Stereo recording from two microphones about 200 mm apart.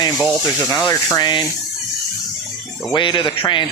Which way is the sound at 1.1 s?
20° left (ahead or behind).